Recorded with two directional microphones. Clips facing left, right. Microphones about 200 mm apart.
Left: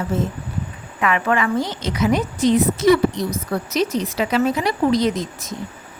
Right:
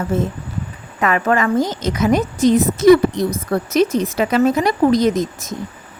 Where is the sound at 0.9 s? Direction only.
40° right (ahead or behind).